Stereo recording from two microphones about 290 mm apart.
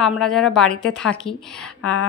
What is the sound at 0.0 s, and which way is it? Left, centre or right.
A woman's voice, centre.